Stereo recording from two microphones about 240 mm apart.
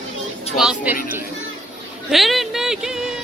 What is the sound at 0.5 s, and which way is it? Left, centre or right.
Speech, centre.